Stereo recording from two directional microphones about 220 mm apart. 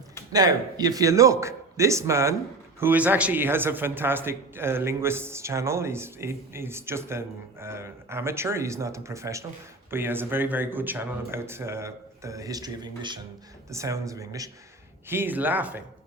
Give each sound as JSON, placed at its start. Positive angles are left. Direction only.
{"t": 0.3, "sound": "a man's voice", "side_deg": -15}